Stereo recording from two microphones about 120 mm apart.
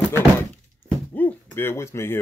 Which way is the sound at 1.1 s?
15° left (ahead or behind).